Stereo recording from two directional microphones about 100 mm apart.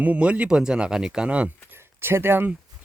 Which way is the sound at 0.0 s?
15° right (ahead or behind).